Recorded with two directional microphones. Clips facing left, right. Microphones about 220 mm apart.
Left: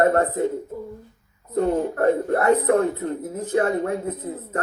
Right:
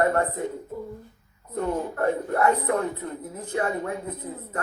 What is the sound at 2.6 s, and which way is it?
Speech, 50° left (ahead or behind).